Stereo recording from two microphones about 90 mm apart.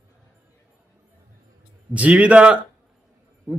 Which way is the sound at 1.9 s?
15° right (ahead or behind).